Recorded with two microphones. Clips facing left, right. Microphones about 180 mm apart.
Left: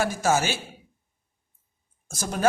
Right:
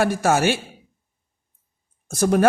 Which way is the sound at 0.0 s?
60° right (ahead or behind).